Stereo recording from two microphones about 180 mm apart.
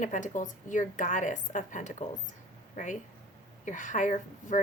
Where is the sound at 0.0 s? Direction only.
45° left (ahead or behind).